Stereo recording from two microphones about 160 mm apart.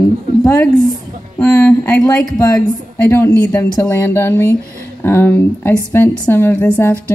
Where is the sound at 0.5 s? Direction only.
10° left (ahead or behind).